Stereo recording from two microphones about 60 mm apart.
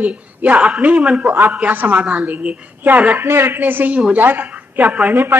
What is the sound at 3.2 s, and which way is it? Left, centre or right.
Speech, right.